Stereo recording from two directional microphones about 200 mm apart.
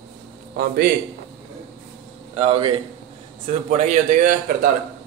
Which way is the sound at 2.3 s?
25° right (ahead or behind).